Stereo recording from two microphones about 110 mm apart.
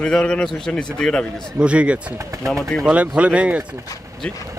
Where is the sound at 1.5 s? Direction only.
10° right (ahead or behind).